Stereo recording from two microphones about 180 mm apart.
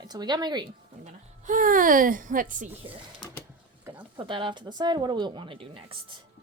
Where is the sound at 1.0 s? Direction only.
45° right (ahead or behind).